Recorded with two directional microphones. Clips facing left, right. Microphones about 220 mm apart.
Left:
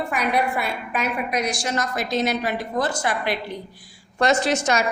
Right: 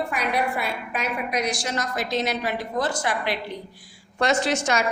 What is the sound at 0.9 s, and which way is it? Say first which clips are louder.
A woman's voice: left 3 dB; 50° left (ahead or behind).